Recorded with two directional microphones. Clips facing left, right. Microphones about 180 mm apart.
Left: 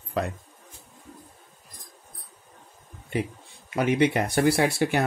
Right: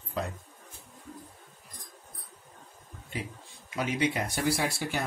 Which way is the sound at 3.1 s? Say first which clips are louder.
Left 9 dB; 65° left (ahead or behind).